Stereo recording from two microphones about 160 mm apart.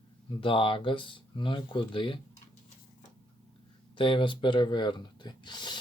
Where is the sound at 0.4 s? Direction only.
35° left (ahead or behind).